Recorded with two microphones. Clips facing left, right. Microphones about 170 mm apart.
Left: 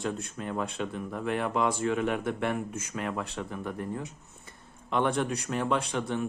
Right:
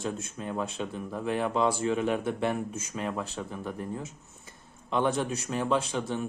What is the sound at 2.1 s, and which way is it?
Speech, 25° right (ahead or behind).